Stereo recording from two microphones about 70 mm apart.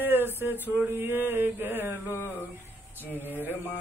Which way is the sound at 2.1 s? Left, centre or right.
Left.